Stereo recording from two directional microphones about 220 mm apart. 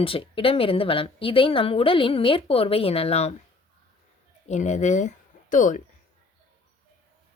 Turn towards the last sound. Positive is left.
turn(degrees=35)  # may be behind; listen again after turning